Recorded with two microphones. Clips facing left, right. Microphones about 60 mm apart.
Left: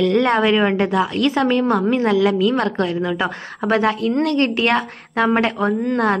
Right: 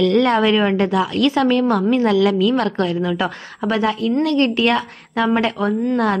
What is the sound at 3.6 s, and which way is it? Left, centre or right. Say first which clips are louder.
A woman's voice: left 1 dB; left.